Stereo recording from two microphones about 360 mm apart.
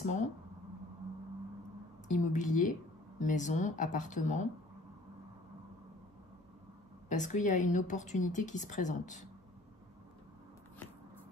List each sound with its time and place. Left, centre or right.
0.0 s a sound: centre
2.0 s a woman's voice: left
7.1 s a woman's voice: left